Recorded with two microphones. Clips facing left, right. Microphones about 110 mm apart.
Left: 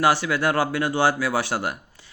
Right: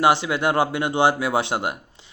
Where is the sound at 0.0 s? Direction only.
20° right (ahead or behind).